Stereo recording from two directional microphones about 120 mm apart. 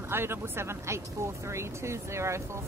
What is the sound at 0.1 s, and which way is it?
Speech, 20° right (ahead or behind).